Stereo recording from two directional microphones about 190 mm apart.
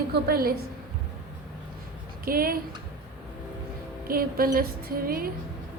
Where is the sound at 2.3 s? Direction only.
50° right (ahead or behind).